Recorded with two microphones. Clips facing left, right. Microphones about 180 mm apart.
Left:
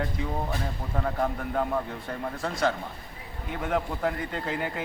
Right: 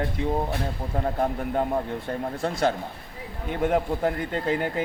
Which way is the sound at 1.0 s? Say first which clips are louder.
Right 3 dB; 35° right (ahead or behind).